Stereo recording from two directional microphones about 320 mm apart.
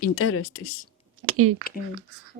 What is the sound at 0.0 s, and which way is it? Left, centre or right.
Speech, left.